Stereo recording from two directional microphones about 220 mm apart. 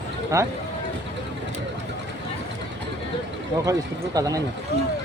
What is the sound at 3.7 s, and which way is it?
Speech, 15° right (ahead or behind).